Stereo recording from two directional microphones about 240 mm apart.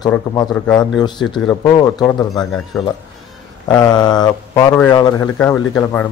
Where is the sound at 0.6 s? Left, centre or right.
Centre.